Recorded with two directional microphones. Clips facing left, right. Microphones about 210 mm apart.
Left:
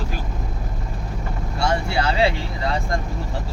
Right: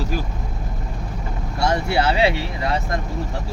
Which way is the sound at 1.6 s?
20° right (ahead or behind).